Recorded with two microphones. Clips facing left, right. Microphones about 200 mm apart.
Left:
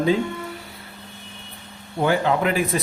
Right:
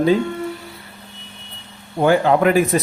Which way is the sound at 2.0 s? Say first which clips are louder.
Right 6 dB; 45° right (ahead or behind).